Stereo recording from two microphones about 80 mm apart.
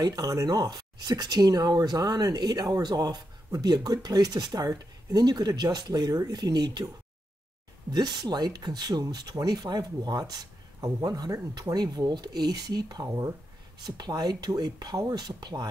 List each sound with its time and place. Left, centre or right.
0.0 s speech: right
7.9 s speech: right